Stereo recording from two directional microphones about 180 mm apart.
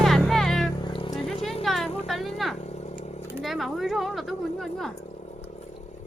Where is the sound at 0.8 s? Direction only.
25° left (ahead or behind).